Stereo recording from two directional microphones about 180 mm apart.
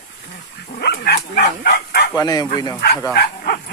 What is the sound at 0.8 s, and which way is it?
Bow-wow, 60° left (ahead or behind).